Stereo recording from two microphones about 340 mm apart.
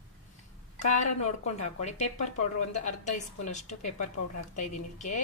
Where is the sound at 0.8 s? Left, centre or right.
Left.